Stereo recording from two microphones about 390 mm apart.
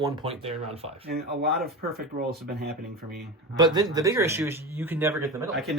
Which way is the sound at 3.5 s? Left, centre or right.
Centre.